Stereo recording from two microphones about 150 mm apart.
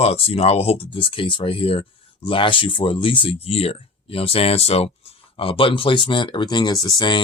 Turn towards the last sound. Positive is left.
turn(degrees=30)  # may be behind; listen again after turning